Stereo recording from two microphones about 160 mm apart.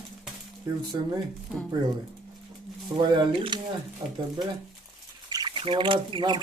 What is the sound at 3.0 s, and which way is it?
Speech, 30° right (ahead or behind).